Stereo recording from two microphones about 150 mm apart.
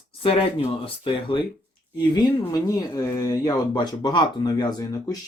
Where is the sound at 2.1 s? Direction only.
25° left (ahead or behind).